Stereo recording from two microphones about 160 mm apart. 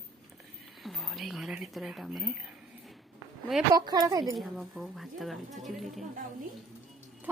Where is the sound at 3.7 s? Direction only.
25° right (ahead or behind).